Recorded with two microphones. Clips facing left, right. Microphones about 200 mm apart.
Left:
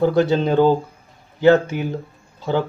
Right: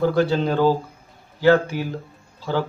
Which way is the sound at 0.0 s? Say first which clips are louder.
Left 3 dB; 20° left (ahead or behind).